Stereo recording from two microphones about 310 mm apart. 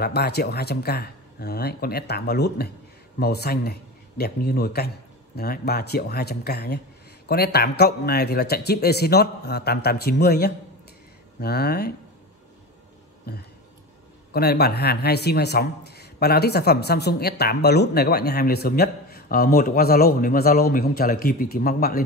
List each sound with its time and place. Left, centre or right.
0.0 s speech: left
13.3 s speech: left